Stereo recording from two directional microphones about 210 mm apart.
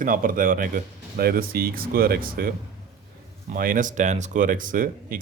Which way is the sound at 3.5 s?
40° right (ahead or behind).